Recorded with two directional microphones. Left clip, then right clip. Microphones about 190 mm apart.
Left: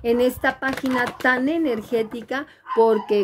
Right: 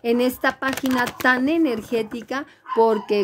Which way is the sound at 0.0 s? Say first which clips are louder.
Left 1 dB; 30° right (ahead or behind).